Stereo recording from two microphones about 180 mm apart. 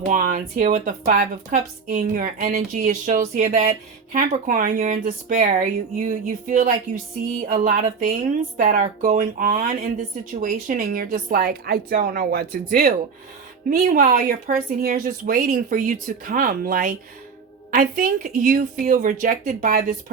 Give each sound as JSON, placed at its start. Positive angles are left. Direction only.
{"t": 0.0, "sound": "a woman's voice", "side_deg": -45}